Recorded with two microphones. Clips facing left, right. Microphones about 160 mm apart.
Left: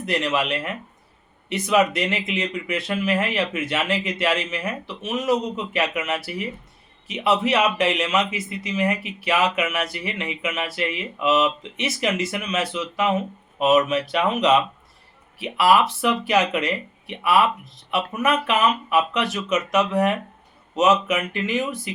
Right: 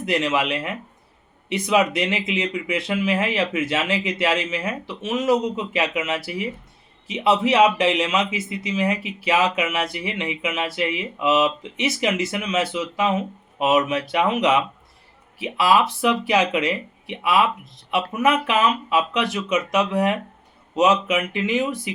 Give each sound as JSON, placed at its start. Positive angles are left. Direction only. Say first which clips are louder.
{"t": 0.0, "sound": "speech", "louder": "right 2 dB", "side_deg": -20}